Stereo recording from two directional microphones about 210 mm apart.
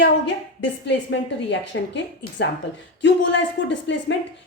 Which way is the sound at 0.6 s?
55° left (ahead or behind).